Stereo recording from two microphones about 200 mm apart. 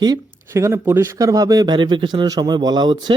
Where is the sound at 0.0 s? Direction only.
15° right (ahead or behind).